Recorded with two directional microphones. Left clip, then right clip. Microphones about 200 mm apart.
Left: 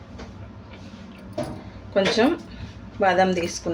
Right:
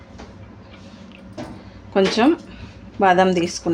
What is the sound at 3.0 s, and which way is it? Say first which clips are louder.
Speech: right 4 dB; 45° right (ahead or behind).